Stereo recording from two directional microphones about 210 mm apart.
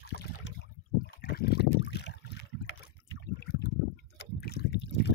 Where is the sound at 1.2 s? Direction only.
50° left (ahead or behind).